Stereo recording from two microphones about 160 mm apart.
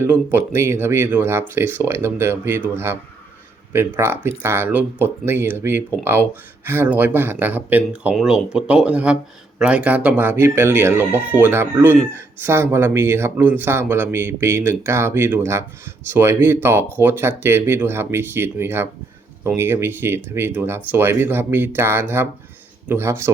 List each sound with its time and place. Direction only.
0.0 s speech: 10° right (ahead or behind)